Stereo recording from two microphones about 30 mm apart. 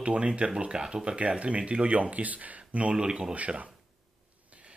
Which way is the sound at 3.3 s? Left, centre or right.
Right.